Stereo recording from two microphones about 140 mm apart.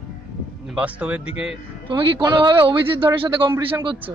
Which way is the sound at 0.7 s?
10° right (ahead or behind).